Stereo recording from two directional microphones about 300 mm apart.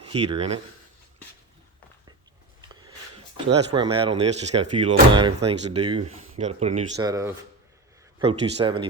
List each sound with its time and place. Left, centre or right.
0.0 s speech: centre
3.3 s speech: centre